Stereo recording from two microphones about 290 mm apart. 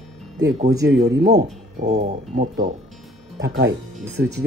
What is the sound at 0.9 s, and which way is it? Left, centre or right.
Speech, right.